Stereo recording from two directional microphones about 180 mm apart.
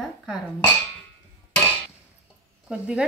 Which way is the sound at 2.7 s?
5° right (ahead or behind).